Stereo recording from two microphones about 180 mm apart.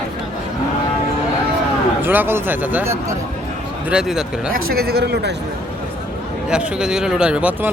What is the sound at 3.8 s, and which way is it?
Speech, 5° right (ahead or behind).